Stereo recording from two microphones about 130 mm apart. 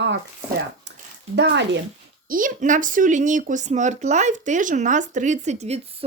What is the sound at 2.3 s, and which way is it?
A woman's voice, 85° right.